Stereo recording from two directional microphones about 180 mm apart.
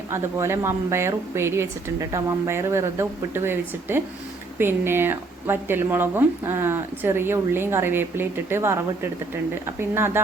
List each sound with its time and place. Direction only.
0.1 s speech: 15° right (ahead or behind)